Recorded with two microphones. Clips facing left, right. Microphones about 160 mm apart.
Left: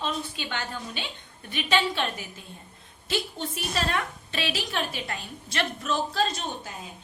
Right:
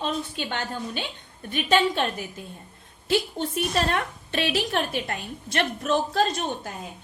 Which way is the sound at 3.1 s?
55° right (ahead or behind).